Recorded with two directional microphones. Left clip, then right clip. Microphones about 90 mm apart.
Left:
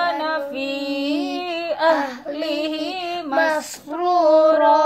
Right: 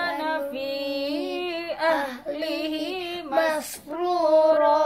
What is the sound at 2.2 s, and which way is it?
Child singing, 20° right (ahead or behind).